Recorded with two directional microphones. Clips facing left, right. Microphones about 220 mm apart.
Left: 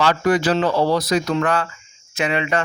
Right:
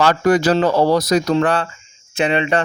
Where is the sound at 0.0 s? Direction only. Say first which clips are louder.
Right 3 dB; 45° right (ahead or behind).